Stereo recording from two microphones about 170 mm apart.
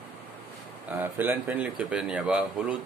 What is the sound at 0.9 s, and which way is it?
Speech, 10° right (ahead or behind).